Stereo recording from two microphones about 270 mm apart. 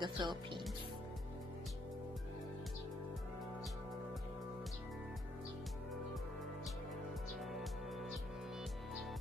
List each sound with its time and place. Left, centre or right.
0.0 s speech: centre
7.5 s music: centre